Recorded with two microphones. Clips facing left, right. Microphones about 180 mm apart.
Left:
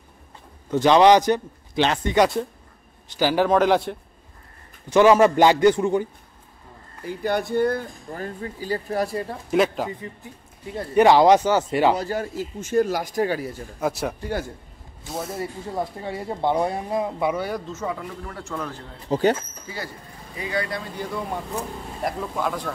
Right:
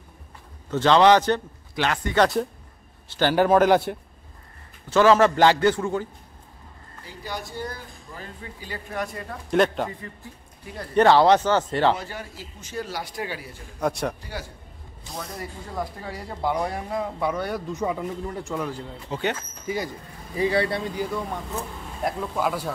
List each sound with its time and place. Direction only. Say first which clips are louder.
0.7 s a man's voice: left 2 dB; 15° left (ahead or behind)
2.1 s speech: even; 5° left (ahead or behind)
4.8 s a man's voice: left 2 dB; 15° left (ahead or behind)
7.1 s speech: left 11 dB; 60° left (ahead or behind); by 9.4 s 30° left (ahead or behind)
9.5 s speech: even; centre (ahead or behind)
10.2 s a man's voice: left 4 dB; 20° left (ahead or behind)
12.0 s speech: left 10 dB; 45° left (ahead or behind)
13.7 s speech: even; 5° left (ahead or behind)
15.3 s speech: left 3 dB; 25° left (ahead or behind)
17.6 s speech: right 3 dB; 15° right (ahead or behind)
19.0 s speech: left 8 dB; 35° left (ahead or behind)
19.7 s speech: right 7 dB; 15° right (ahead or behind)
20.3 s speech: right 5 dB; 30° right (ahead or behind)
20.9 s speech: right 1 dB; 10° right (ahead or behind)